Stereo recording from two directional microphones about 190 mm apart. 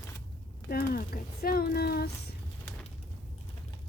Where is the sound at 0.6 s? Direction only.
55° left (ahead or behind).